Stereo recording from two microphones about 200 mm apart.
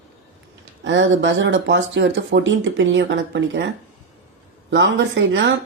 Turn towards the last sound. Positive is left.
turn(degrees=-65)  # may be behind; listen again after turning